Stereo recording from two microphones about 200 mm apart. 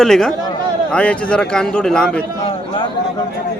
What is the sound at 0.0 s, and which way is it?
A man's voice, centre (ahead or behind).